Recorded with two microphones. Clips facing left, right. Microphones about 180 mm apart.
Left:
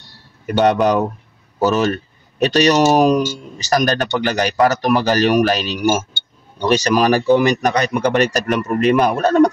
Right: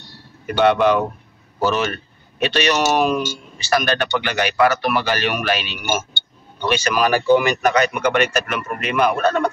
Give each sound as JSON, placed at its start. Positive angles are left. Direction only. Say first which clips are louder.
{"t": 0.6, "sound": "speech", "louder": "left 1 dB", "side_deg": 40}